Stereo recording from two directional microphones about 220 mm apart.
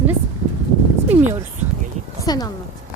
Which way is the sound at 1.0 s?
10° right (ahead or behind).